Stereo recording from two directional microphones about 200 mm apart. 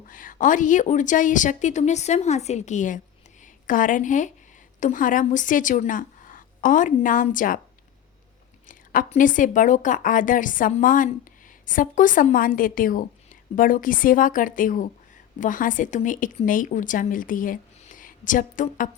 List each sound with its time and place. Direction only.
0.1 s a woman's voice: 40° left (ahead or behind)
8.6 s a woman's voice: 40° left (ahead or behind)